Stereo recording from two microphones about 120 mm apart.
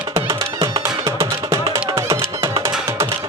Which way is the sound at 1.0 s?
25° right (ahead or behind).